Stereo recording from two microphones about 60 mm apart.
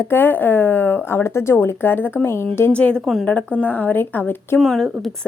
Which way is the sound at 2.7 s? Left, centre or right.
Left.